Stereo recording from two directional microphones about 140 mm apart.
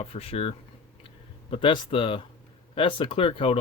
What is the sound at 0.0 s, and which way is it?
Speech, 45° left (ahead or behind).